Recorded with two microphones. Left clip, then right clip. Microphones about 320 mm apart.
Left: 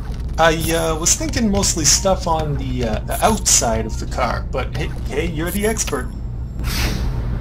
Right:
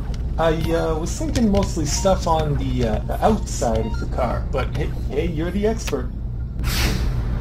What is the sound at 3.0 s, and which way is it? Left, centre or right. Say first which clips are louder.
Speech: left 5 dB; left.